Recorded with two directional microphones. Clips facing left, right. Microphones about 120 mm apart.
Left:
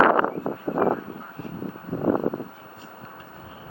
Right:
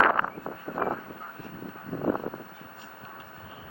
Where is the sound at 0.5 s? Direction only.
30° left (ahead or behind).